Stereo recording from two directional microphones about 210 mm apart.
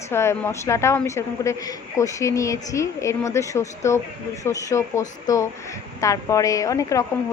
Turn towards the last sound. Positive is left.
turn(degrees=15)  # may be behind; listen again after turning